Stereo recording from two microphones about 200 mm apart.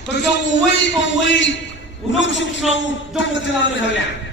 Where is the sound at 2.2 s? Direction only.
65° left (ahead or behind).